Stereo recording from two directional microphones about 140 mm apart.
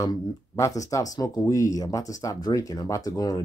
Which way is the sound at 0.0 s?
25° left (ahead or behind).